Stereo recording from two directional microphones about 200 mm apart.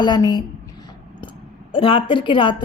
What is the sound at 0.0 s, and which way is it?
Speech, 20° left (ahead or behind).